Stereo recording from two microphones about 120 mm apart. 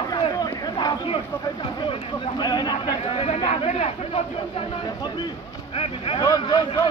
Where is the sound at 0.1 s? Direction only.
35° left (ahead or behind).